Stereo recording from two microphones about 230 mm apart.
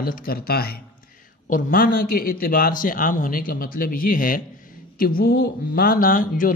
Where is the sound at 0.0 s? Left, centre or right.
Left.